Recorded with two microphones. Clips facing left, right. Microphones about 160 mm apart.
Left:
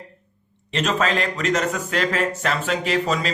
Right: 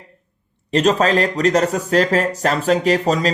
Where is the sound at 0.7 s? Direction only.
35° right (ahead or behind).